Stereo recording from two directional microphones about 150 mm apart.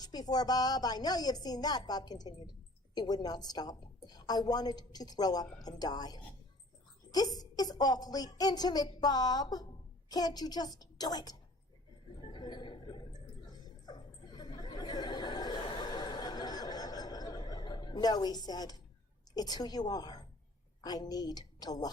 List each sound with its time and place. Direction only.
0.0 s a woman's voice: 25° left (ahead or behind)
12.2 s a sound: 30° left (ahead or behind)
19.4 s a woman's voice: 25° left (ahead or behind)